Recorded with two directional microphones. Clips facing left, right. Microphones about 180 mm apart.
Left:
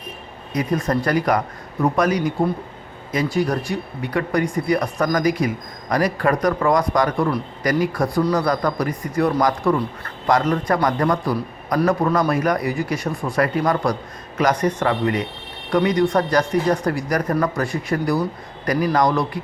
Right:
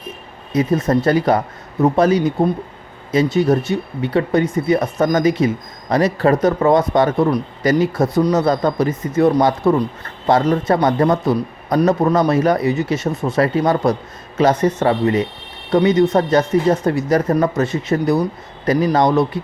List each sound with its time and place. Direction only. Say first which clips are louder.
0.5 s speech: right 5 dB; 25° right (ahead or behind)